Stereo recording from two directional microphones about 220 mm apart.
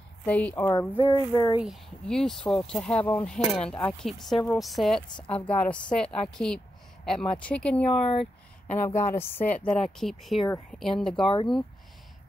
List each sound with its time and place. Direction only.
0.2 s speech: 5° left (ahead or behind)
0.7 s speech: 20° left (ahead or behind)
1.6 s a woman's voice: centre (ahead or behind)
11.2 s speech: 20° left (ahead or behind)